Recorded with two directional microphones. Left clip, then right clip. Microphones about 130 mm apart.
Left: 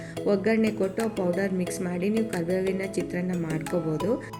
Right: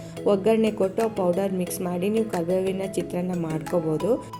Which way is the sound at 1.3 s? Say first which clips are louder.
Right 2 dB; 30° left (ahead or behind).